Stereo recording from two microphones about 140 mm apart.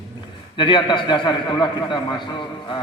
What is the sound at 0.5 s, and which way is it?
A man's voice, 35° left (ahead or behind).